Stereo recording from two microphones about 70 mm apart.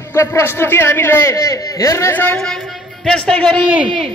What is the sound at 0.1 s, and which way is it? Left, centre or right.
A man's voice, left.